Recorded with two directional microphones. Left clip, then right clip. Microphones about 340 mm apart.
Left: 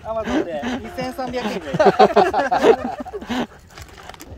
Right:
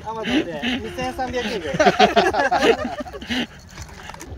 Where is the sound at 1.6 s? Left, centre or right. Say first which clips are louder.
Left 2 dB; left.